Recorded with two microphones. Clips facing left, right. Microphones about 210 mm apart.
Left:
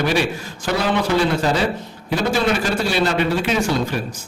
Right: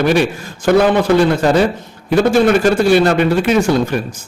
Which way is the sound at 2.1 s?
50° right (ahead or behind).